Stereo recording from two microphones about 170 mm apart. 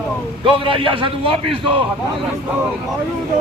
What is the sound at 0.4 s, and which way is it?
A man's voice, 30° right (ahead or behind).